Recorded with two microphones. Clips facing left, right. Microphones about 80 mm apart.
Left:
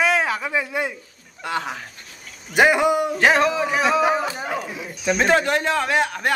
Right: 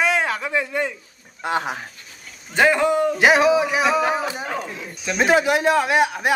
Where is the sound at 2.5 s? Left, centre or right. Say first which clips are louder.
Even; centre.